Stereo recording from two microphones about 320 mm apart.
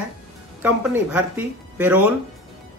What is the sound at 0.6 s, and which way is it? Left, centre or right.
Speech, centre.